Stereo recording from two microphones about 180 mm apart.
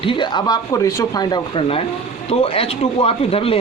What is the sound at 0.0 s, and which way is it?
Speech, 25° left (ahead or behind).